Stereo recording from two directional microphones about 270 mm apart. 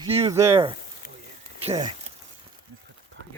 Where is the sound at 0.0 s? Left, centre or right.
Centre.